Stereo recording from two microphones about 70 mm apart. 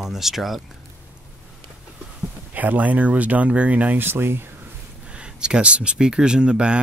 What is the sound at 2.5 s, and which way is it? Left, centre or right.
Speech, right.